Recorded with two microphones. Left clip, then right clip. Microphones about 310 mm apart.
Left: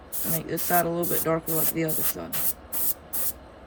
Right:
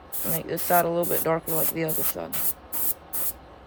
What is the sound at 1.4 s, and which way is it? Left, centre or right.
Rub, centre.